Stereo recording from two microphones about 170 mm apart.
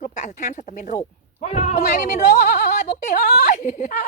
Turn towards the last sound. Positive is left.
turn(degrees=50)  # may be behind; listen again after turning